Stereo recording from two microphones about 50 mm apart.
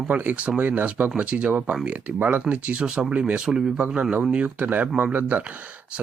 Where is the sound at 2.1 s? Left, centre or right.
Right.